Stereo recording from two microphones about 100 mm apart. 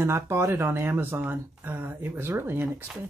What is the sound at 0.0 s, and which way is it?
Speech, 25° right (ahead or behind).